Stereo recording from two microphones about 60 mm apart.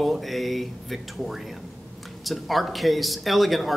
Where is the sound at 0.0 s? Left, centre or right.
Centre.